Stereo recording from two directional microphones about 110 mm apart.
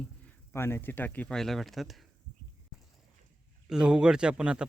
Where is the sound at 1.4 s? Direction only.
Centre (ahead or behind).